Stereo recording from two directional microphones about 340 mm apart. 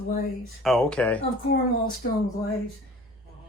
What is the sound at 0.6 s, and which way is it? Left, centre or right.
Speech, centre.